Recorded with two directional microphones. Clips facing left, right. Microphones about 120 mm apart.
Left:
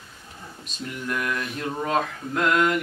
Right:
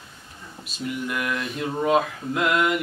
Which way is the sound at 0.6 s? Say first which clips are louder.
Right 3 dB; 5° right (ahead or behind).